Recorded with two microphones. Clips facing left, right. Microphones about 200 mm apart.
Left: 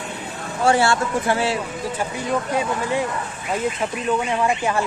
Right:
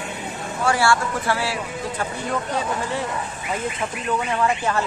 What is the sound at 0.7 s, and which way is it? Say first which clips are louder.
Speech: left 2 dB; 20° left (ahead or behind).